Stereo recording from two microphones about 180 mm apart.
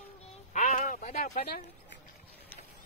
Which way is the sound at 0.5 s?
45° left (ahead or behind).